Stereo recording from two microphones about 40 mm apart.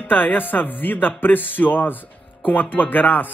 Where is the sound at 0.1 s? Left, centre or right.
Left.